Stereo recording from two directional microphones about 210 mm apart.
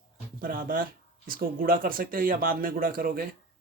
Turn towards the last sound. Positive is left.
turn(degrees=-45)  # may be behind; listen again after turning